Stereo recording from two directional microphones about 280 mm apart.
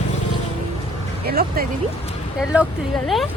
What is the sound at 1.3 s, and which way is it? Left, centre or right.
Speech, right.